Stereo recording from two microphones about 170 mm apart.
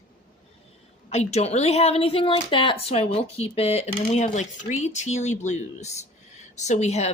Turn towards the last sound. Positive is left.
turn(degrees=40)  # may be behind; listen again after turning